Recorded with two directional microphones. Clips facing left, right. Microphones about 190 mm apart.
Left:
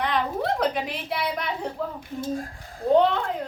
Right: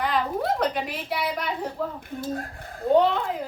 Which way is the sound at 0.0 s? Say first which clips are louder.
Even; centre (ahead or behind).